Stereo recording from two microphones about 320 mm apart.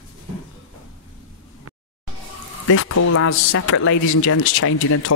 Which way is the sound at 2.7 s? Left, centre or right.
Left.